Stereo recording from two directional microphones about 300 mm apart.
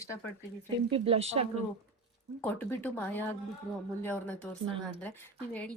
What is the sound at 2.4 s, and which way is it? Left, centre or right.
Speech, centre.